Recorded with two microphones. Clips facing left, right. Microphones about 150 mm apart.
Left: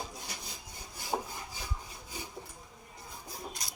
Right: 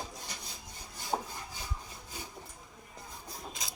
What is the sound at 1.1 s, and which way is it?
Wood, 5° right (ahead or behind).